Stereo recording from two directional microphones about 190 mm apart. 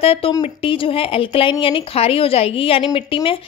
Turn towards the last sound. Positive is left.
turn(degrees=25)  # may be behind; listen again after turning